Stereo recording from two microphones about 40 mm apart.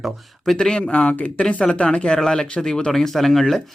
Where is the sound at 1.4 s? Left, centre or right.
Left; by 3.6 s centre.